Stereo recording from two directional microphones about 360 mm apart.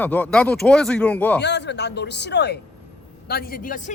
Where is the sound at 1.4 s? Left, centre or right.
Left.